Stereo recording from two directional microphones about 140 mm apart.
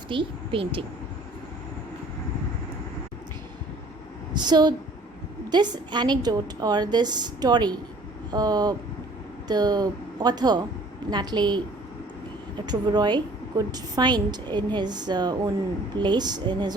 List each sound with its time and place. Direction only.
0.1 s a woman's voice: 40° right (ahead or behind)
4.4 s a woman's voice: 30° right (ahead or behind)
12.6 s a woman's voice: 30° right (ahead or behind)